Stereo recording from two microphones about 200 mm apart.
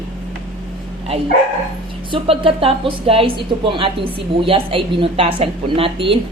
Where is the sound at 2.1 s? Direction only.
25° right (ahead or behind).